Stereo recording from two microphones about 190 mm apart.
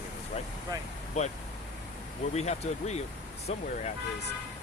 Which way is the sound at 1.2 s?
35° left (ahead or behind).